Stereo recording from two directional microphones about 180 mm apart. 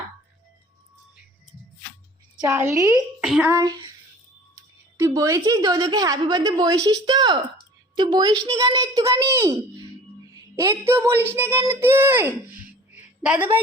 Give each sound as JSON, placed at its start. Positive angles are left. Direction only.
{"t": 2.4, "sound": "speech", "side_deg": -15}
{"t": 3.2, "sound": "a child's voice", "side_deg": -5}
{"t": 3.5, "sound": "a child's voice", "side_deg": -20}
{"t": 12.9, "sound": "a sound", "side_deg": -5}